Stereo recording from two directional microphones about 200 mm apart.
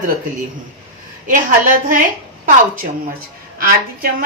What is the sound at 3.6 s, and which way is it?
Speech, 45° right (ahead or behind).